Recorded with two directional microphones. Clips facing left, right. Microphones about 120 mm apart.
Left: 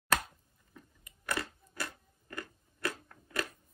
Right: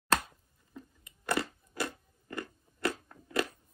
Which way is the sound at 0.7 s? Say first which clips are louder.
Right 7 dB; 25° right (ahead or behind).